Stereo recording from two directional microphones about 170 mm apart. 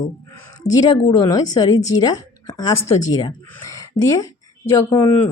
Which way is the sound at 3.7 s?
20° left (ahead or behind).